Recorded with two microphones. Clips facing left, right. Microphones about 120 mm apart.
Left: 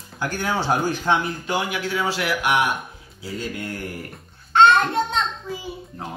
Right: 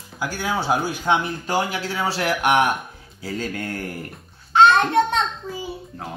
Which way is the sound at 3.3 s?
50° right (ahead or behind).